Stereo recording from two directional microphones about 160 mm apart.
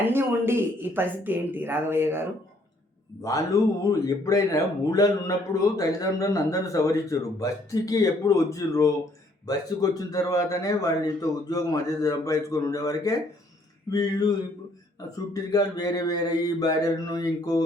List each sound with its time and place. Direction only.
0.0 s speech: 15° right (ahead or behind)
3.2 s speech: 20° left (ahead or behind)